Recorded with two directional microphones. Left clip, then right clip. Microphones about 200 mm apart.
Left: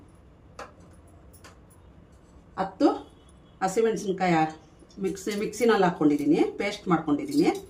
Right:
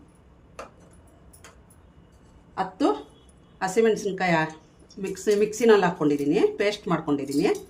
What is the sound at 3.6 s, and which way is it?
Speech, 30° right (ahead or behind).